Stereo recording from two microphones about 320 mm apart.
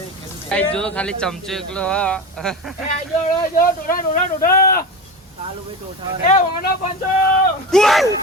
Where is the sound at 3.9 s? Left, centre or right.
Left.